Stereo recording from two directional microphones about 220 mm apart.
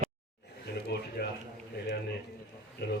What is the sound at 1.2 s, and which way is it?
Speech, 45° left (ahead or behind).